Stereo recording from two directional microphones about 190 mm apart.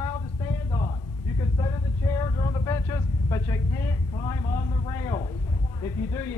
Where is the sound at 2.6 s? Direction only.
15° left (ahead or behind).